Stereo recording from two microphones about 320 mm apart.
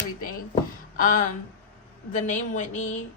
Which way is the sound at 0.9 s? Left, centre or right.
Left.